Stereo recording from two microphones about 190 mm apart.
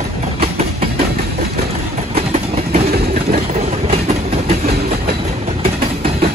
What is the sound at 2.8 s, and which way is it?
Vehicle, 55° right (ahead or behind).